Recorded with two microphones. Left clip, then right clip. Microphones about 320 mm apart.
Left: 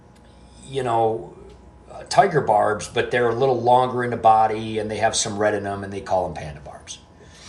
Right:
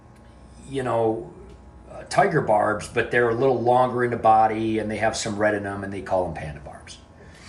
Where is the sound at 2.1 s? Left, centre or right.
Centre.